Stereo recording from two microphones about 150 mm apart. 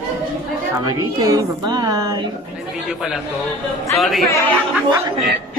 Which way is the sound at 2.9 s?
5° right (ahead or behind).